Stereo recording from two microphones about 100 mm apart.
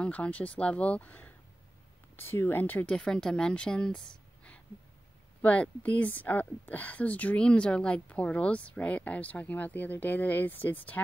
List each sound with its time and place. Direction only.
0.0 s speech: 15° left (ahead or behind)
3.0 s speech: 5° left (ahead or behind)